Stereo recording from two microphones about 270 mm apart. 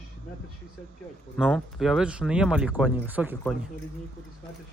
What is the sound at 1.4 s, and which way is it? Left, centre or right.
Speech, centre.